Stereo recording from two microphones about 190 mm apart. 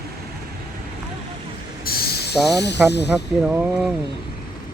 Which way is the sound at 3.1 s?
5° right (ahead or behind).